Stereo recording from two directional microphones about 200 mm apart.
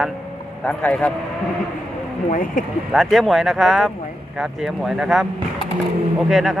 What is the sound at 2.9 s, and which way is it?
Speech, centre (ahead or behind).